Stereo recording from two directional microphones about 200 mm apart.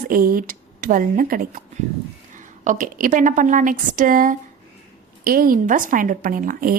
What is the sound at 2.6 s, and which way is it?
A woman's voice, 40° right (ahead or behind).